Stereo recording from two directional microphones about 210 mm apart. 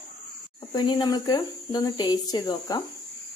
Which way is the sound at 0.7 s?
20° left (ahead or behind).